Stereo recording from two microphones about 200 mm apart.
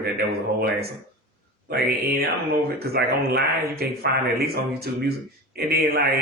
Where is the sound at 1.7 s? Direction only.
50° right (ahead or behind).